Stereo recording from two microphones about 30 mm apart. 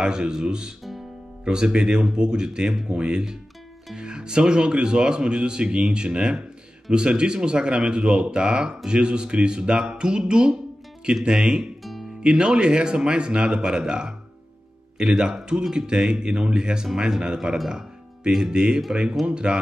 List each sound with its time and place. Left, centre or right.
0.0 s speech: right
15.1 s speech: right
17.6 s music: centre
18.5 s speech: right